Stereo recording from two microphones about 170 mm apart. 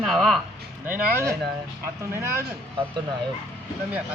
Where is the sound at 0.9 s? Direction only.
10° right (ahead or behind).